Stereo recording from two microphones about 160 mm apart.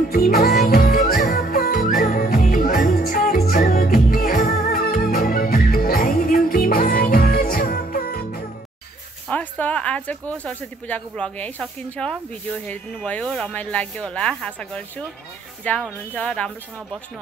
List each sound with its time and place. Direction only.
0.1 s music: 70° left (ahead or behind); by 4.7 s 55° left (ahead or behind)
4.7 s music: 65° left (ahead or behind)
9.3 s speech: 10° left (ahead or behind)